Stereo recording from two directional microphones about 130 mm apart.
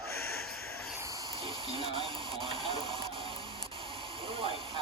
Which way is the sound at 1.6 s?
40° right (ahead or behind).